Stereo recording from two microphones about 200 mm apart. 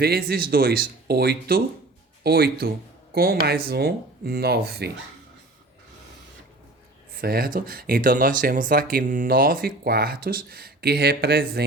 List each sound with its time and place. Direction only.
0.0 s speech: 50° right (ahead or behind)
7.2 s speech: 50° right (ahead or behind)